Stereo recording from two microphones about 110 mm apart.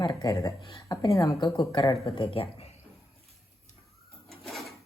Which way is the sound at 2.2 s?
55° left (ahead or behind).